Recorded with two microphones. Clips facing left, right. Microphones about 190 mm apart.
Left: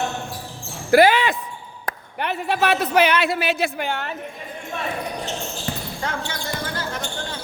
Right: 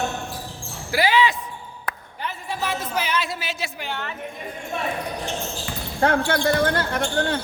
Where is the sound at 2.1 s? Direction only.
70° left (ahead or behind); by 4.1 s 50° left (ahead or behind).